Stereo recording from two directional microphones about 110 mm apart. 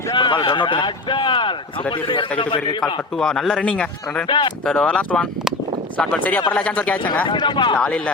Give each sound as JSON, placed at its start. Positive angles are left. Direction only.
{"t": 0.1, "sound": "speech", "side_deg": 40}
{"t": 2.8, "sound": "speech", "side_deg": 5}
{"t": 4.3, "sound": "speech", "side_deg": 45}
{"t": 4.6, "sound": "speech", "side_deg": 10}
{"t": 7.3, "sound": "speech", "side_deg": 45}
{"t": 7.8, "sound": "speech", "side_deg": 10}